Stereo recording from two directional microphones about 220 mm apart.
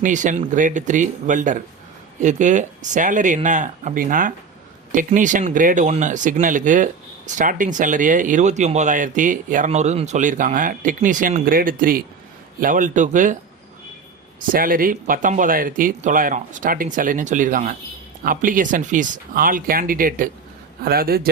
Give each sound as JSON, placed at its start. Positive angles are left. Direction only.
{"t": 0.0, "sound": "speech", "side_deg": -35}
{"t": 14.5, "sound": "speech", "side_deg": -40}